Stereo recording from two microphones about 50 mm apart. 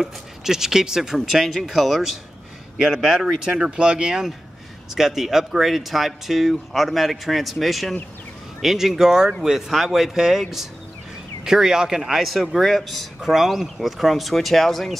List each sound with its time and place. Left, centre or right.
0.0 s speech: centre
11.4 s speech: centre